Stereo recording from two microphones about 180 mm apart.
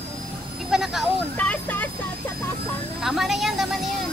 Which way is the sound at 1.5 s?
10° left (ahead or behind).